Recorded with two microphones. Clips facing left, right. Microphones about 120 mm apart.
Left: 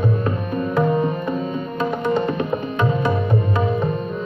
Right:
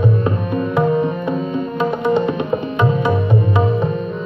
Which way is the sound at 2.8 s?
15° right (ahead or behind).